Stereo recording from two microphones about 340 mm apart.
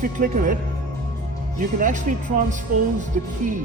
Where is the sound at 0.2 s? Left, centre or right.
Right.